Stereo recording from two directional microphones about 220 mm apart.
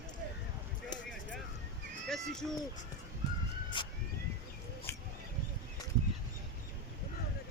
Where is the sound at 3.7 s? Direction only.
20° left (ahead or behind).